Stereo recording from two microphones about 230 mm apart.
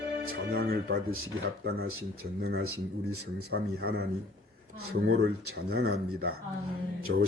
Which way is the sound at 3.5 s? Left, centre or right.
Right.